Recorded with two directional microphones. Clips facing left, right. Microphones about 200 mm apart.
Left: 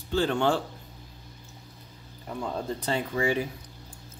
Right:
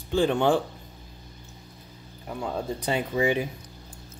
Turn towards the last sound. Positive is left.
turn(degrees=-20)  # may be behind; listen again after turning